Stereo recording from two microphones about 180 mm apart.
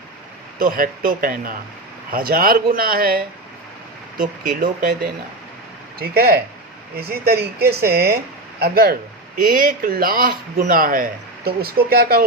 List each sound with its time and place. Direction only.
0.6 s speech: 50° right (ahead or behind)